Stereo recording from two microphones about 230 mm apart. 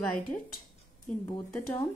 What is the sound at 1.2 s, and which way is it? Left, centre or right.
Speech, left.